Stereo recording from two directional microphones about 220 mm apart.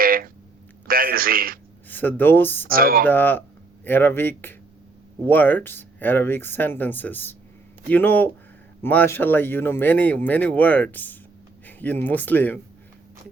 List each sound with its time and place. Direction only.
0.0 s a sound: 40° right (ahead or behind)
0.9 s a man's voice: 40° right (ahead or behind)
1.9 s speech: 10° left (ahead or behind)
2.6 s a man's voice: 40° right (ahead or behind)
3.1 s speech: 10° left (ahead or behind)